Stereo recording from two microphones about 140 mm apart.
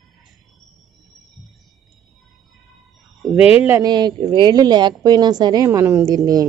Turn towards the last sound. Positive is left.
turn(degrees=-25)  # may be behind; listen again after turning